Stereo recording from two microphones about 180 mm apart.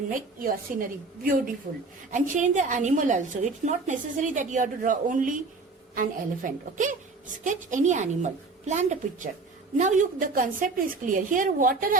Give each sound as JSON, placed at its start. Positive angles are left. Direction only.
{"t": 0.1, "sound": "a woman's voice", "side_deg": -50}